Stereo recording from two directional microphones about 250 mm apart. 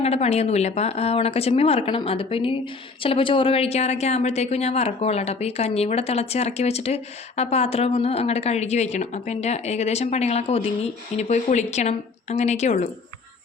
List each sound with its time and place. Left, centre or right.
0.0 s a woman's voice: left